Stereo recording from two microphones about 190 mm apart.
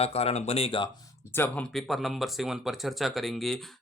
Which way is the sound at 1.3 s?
10° left (ahead or behind).